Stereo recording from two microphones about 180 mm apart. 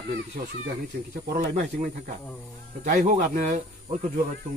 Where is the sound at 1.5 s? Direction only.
45° right (ahead or behind).